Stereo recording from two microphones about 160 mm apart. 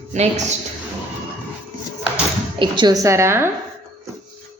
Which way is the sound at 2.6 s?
30° right (ahead or behind).